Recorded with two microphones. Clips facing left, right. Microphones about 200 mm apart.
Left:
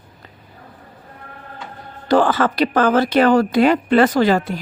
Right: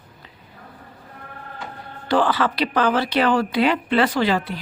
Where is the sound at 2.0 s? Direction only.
45° left (ahead or behind).